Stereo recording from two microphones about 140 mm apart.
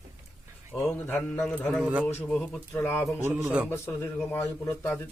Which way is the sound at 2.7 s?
15° left (ahead or behind).